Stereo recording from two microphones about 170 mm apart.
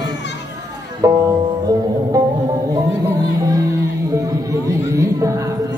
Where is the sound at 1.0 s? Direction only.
20° right (ahead or behind).